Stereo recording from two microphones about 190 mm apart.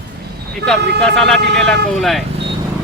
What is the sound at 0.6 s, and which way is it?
Speech, 65° right (ahead or behind).